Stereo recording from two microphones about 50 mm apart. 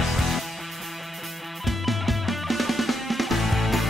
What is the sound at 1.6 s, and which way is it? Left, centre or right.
Music, centre.